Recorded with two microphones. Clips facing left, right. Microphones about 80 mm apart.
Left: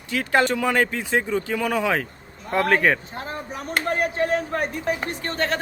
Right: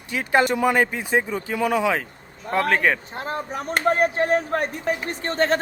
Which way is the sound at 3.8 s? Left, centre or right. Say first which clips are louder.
Right 4 dB; right.